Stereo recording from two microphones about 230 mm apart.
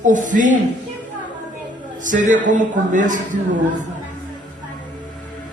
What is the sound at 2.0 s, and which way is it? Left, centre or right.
A man's voice, right.